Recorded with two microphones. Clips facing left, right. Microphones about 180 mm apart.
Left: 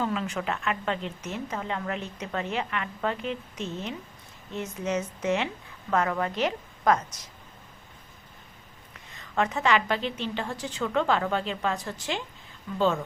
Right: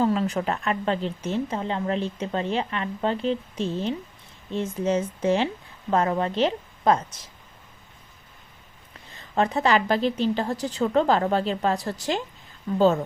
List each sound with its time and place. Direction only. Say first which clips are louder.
0.0 s a woman's voice: right 6 dB; 35° right (ahead or behind)
9.0 s speech: right 4 dB; 30° right (ahead or behind)